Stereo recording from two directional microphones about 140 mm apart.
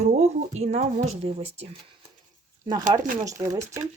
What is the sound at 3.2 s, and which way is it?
Speech, 25° right (ahead or behind).